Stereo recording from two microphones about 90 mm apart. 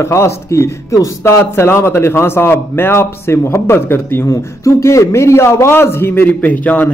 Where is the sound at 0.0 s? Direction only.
35° left (ahead or behind).